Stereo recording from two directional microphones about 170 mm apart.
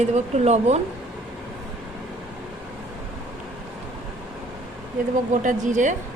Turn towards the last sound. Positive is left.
turn(degrees=-50)  # may be behind; listen again after turning